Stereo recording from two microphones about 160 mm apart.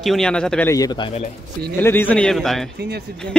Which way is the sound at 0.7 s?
25° left (ahead or behind).